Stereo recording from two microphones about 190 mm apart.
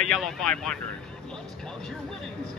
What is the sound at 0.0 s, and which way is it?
Speech, centre (ahead or behind).